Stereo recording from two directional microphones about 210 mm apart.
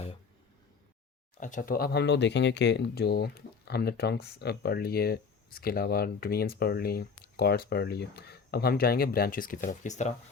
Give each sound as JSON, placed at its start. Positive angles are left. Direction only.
{"t": 1.4, "sound": "speech", "side_deg": 35}